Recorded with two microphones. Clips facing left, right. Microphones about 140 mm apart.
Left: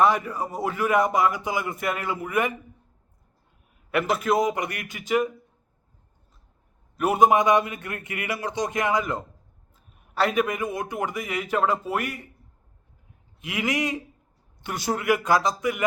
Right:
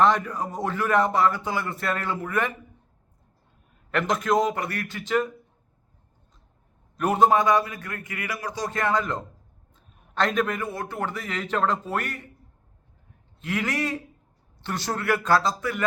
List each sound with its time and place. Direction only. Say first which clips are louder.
0.0 s a man's voice: even; 10° left (ahead or behind)
3.9 s a man's voice: even; 10° left (ahead or behind)
6.9 s a man's voice: left 1 dB; 10° left (ahead or behind)
13.4 s a man's voice: left 1 dB; 10° left (ahead or behind)